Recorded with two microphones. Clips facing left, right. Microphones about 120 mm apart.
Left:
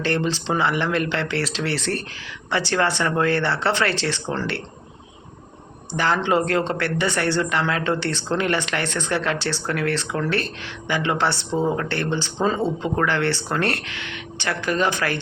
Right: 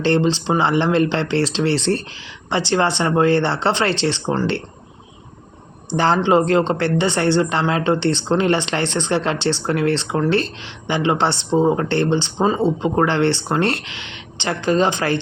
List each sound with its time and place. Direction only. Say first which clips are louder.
0.0 s speech: right 6 dB; 25° right (ahead or behind)
6.1 s speech: right 6 dB; 25° right (ahead or behind)